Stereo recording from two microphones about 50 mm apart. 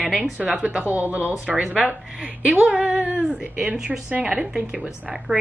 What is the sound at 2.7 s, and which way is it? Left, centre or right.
A woman's voice, right.